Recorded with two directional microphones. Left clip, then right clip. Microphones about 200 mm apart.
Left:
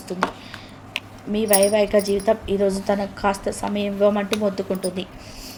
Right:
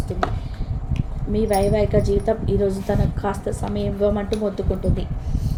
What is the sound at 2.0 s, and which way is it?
A woman's voice, 15° left (ahead or behind).